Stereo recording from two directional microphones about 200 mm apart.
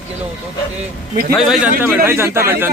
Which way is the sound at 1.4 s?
5° right (ahead or behind).